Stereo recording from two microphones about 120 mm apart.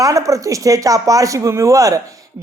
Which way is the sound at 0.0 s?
25° right (ahead or behind).